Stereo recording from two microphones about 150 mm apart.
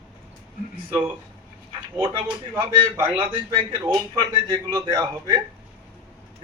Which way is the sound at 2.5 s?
15° right (ahead or behind).